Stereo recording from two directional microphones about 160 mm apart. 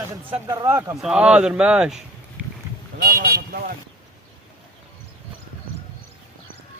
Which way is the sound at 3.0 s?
75° right (ahead or behind).